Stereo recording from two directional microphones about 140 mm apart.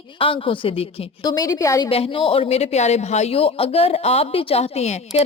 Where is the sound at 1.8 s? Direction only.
40° left (ahead or behind).